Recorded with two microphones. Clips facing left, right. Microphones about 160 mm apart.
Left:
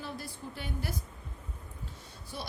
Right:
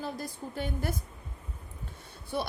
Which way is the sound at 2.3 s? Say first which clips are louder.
Right 9 dB; 55° right (ahead or behind).